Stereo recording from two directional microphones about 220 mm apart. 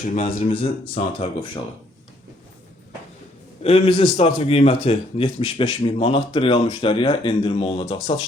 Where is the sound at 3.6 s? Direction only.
25° left (ahead or behind).